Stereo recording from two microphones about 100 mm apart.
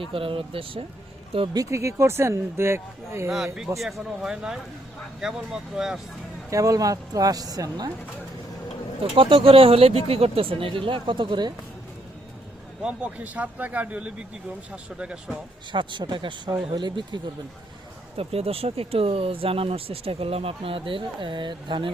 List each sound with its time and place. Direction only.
0.0 s speech: 65° right (ahead or behind)
1.5 s speech: 30° right (ahead or behind)
3.3 s a man's voice: 5° right (ahead or behind)
6.5 s speech: 35° right (ahead or behind)
9.1 s speech: 65° right (ahead or behind)
12.8 s a man's voice: 10° right (ahead or behind)
15.7 s speech: 50° right (ahead or behind)
18.2 s speech: 80° right; by 21.9 s 55° right (ahead or behind)